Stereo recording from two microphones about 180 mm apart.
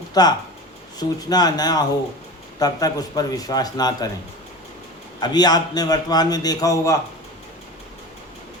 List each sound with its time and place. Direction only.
0.1 s a man's voice: 20° left (ahead or behind)
5.2 s a man's voice: 20° left (ahead or behind)